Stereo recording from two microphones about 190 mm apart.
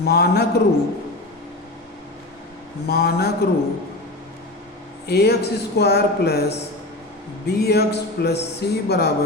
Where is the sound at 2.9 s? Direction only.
55° left (ahead or behind).